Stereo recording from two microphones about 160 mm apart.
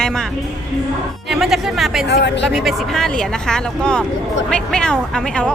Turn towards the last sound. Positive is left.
turn(degrees=5)  # may be behind; listen again after turning